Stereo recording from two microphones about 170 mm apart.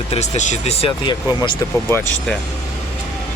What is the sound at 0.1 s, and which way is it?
Speech, 45° left (ahead or behind).